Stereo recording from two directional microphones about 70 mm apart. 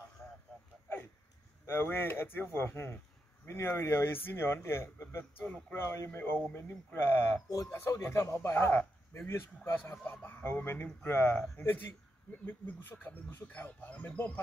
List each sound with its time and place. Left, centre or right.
1.7 s speech: left
7.4 s speech: left
7.7 s speech: left
11.6 s speech: left